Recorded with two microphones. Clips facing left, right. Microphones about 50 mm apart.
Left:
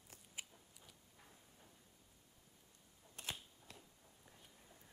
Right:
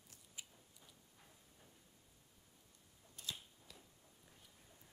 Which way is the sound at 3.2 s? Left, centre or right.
Left.